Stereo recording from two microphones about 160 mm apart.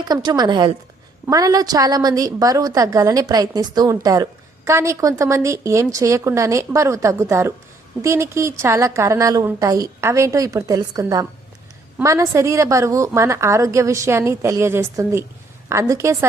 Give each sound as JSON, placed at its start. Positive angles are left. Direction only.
{"t": 0.1, "sound": "a woman's voice", "side_deg": -25}